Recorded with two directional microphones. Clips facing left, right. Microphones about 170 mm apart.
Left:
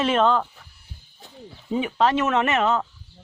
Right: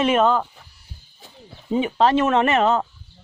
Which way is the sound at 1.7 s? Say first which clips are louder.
Right 3 dB; 25° right (ahead or behind).